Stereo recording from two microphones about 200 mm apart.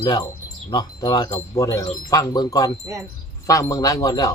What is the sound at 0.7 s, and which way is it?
Speech, 20° left (ahead or behind).